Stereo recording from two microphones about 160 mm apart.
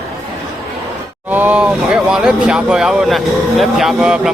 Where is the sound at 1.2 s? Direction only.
10° right (ahead or behind).